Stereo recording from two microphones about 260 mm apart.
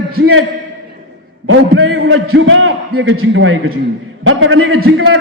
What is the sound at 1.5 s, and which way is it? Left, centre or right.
A man's voice, right.